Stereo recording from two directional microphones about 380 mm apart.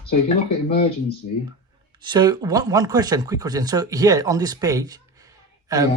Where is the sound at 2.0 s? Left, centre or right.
Centre.